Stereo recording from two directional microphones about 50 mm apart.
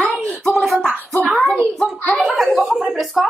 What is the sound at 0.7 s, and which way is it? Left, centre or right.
Speech, right.